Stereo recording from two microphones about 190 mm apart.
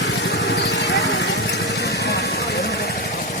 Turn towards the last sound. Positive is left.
turn(degrees=55)  # may be behind; listen again after turning